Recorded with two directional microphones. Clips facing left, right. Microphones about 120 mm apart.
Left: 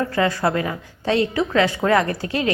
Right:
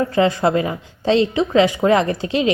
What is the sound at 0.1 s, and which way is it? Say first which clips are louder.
Speech: right 4 dB; 20° right (ahead or behind).